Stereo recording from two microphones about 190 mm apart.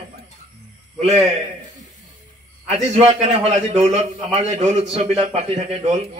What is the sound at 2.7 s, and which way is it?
A man's voice, 35° right (ahead or behind).